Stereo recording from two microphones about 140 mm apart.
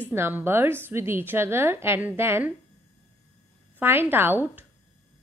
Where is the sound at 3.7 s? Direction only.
15° right (ahead or behind).